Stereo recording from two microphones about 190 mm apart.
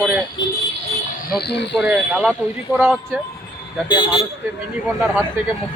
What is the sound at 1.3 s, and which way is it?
Speech, 60° left (ahead or behind).